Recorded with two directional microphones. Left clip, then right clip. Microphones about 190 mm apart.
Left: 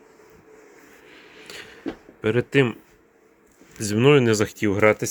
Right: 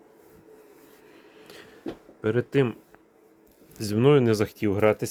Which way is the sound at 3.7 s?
10° left (ahead or behind).